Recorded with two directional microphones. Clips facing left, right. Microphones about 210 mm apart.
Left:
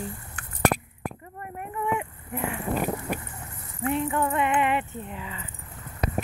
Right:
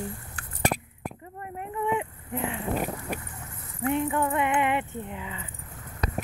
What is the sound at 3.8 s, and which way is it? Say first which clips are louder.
Speech: even; 15° right (ahead or behind).